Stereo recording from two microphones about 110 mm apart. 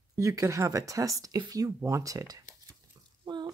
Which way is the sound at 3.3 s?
40° right (ahead or behind).